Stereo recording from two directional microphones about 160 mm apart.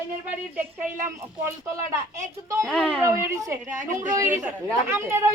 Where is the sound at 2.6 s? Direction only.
5° left (ahead or behind).